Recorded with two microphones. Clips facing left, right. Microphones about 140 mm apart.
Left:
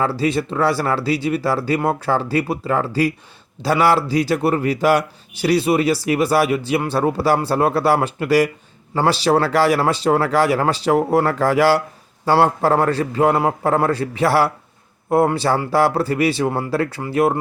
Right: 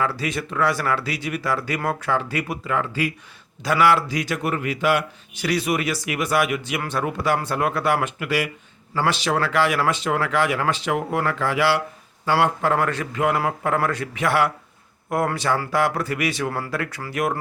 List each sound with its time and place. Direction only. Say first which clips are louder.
0.0 s speech: left 6 dB; 30° left (ahead or behind)